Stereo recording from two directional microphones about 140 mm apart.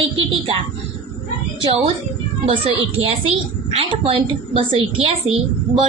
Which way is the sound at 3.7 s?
45° right (ahead or behind).